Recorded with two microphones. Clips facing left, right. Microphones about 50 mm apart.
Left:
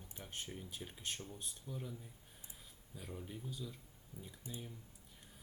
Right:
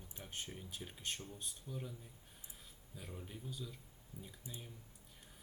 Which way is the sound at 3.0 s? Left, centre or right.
Centre.